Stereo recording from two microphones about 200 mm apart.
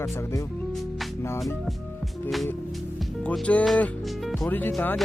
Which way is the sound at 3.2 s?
5° left (ahead or behind).